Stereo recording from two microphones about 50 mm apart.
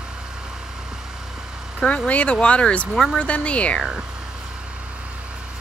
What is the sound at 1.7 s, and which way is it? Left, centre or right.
Speech, left.